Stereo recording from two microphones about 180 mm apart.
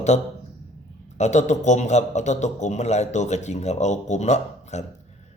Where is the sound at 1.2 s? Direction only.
40° left (ahead or behind).